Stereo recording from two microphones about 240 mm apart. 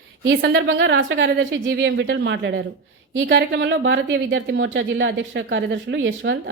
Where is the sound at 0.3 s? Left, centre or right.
Right.